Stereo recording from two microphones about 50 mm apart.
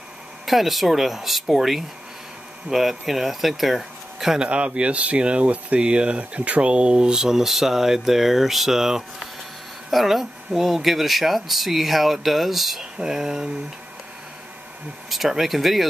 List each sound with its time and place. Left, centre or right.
0.5 s speech: centre
4.5 s speech: right; by 13.5 s centre
15.0 s speech: centre